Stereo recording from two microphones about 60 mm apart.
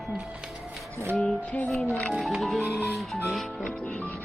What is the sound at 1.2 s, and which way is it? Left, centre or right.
Music, left.